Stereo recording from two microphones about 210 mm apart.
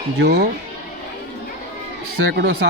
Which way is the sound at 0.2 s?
55° right (ahead or behind).